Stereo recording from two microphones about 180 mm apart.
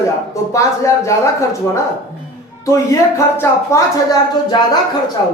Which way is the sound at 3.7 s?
15° left (ahead or behind).